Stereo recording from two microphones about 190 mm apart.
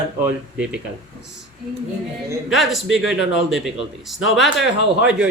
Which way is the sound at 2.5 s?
Centre (ahead or behind).